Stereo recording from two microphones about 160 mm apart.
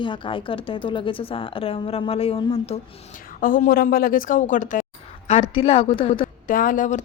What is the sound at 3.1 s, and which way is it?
A woman's voice, 60° left (ahead or behind).